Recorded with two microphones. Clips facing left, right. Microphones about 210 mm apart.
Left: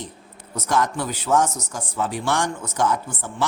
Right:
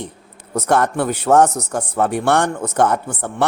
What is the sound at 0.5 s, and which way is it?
Speech, 60° right (ahead or behind).